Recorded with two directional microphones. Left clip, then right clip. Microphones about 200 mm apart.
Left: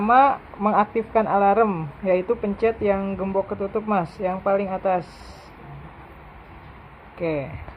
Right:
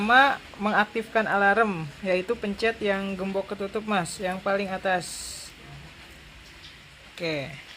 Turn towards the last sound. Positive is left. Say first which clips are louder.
# left 4 dB
turn(degrees=-5)  # may be behind; listen again after turning